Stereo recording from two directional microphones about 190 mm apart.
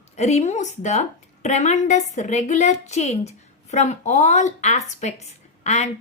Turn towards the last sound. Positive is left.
turn(degrees=35)  # may be behind; listen again after turning